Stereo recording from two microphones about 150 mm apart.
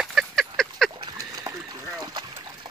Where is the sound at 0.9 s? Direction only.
25° right (ahead or behind).